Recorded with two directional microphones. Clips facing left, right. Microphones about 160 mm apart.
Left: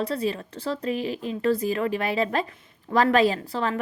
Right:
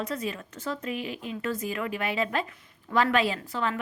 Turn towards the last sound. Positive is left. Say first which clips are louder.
# left 3 dB
turn(degrees=35)  # may be behind; listen again after turning